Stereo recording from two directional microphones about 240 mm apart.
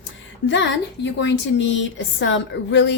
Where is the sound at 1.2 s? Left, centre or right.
Left.